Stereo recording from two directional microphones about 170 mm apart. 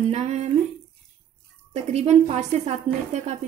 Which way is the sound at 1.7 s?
40° right (ahead or behind).